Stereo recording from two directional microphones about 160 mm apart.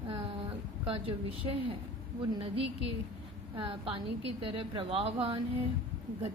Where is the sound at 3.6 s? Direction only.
35° right (ahead or behind).